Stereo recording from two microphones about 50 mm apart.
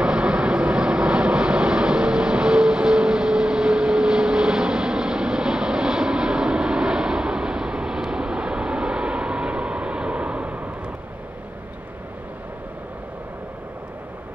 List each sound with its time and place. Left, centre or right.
0.0 s vehicle: centre